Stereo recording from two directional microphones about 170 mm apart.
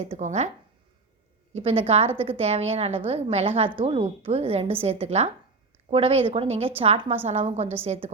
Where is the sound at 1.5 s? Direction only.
35° right (ahead or behind).